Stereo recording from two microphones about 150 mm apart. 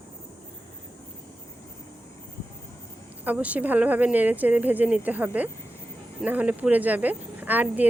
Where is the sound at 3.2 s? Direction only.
10° right (ahead or behind).